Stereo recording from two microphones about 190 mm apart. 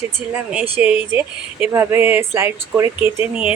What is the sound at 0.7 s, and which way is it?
A woman's voice, 10° right (ahead or behind).